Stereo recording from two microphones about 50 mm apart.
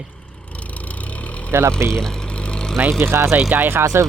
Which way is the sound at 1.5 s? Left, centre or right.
Right.